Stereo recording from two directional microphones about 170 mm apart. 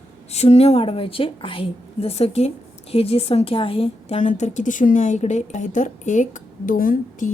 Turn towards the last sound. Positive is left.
turn(degrees=50)  # may be behind; listen again after turning